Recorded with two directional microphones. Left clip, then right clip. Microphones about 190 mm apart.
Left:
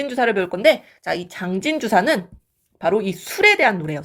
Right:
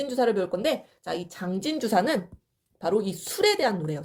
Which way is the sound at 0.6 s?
20° left (ahead or behind).